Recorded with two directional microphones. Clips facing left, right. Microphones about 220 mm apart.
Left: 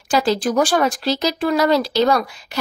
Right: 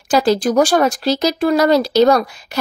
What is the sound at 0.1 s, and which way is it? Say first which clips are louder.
A woman's voice: right 4 dB; 40° right (ahead or behind).